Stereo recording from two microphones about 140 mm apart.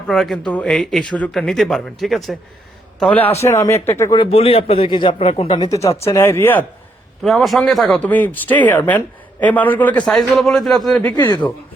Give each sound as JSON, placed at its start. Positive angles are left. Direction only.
{"t": 0.1, "sound": "speech", "side_deg": 5}
{"t": 3.0, "sound": "a man's voice", "side_deg": 10}
{"t": 4.1, "sound": "a man's voice", "side_deg": 40}
{"t": 5.6, "sound": "a man's voice", "side_deg": 20}
{"t": 7.2, "sound": "a man's voice", "side_deg": 0}